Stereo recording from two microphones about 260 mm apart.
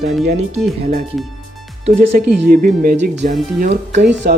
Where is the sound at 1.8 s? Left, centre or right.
Right.